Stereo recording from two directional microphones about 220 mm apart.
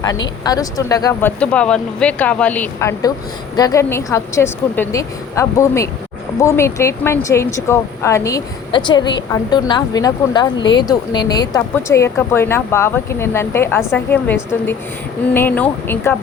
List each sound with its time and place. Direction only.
0.0 s speech: 15° left (ahead or behind)
1.4 s speech: 5° left (ahead or behind)